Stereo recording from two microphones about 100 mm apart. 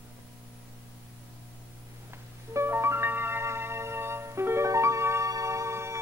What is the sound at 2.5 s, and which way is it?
Music, 25° right (ahead or behind).